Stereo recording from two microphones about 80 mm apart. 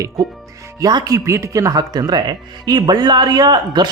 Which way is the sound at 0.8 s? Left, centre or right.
Right.